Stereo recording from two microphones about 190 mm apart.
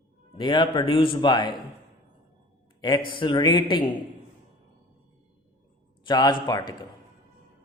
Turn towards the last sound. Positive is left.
turn(degrees=20)  # may be behind; listen again after turning